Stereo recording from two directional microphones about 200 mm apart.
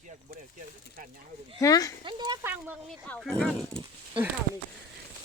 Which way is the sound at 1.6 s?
15° left (ahead or behind).